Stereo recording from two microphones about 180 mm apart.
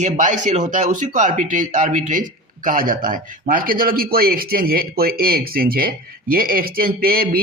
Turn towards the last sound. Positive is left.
turn(degrees=-55)  # may be behind; listen again after turning